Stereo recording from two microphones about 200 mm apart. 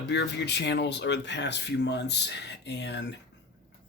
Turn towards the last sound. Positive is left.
turn(degrees=60)  # may be behind; listen again after turning